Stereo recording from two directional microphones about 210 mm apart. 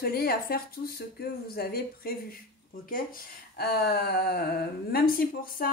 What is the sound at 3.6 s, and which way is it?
Speech, 45° left (ahead or behind).